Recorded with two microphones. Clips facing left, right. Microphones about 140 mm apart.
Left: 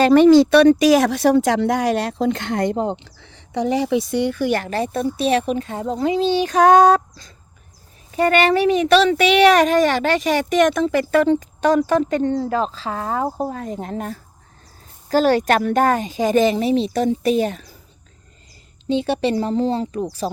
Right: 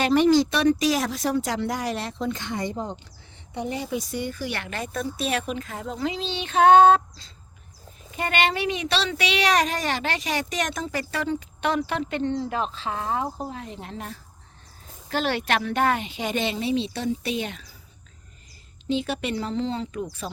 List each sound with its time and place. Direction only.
0.1 s speech: 65° left (ahead or behind); by 2.4 s 90° left
2.4 s speech: 60° left (ahead or behind); by 4.4 s 75° left (ahead or behind)
4.4 s a woman's voice: 40° left (ahead or behind)
18.9 s a woman's voice: 30° left (ahead or behind)